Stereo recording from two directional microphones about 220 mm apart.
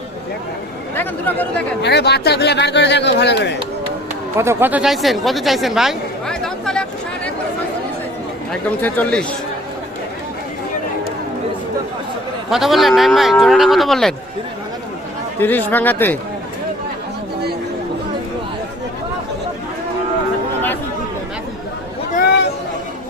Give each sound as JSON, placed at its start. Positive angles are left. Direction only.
{"t": 0.9, "sound": "speech", "side_deg": 10}
{"t": 1.8, "sound": "speech", "side_deg": 50}
{"t": 4.4, "sound": "speech", "side_deg": -10}
{"t": 8.8, "sound": "speech", "side_deg": 5}
{"t": 12.5, "sound": "speech", "side_deg": 0}
{"t": 15.4, "sound": "speech", "side_deg": 10}
{"t": 22.1, "sound": "chatter", "side_deg": 45}